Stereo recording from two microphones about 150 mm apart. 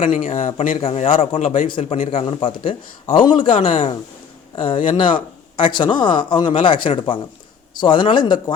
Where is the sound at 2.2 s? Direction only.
35° left (ahead or behind).